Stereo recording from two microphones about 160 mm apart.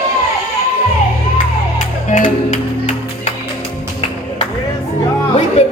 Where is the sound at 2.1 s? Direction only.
50° left (ahead or behind).